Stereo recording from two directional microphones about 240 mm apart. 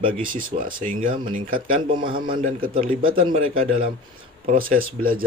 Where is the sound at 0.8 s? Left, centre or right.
Right.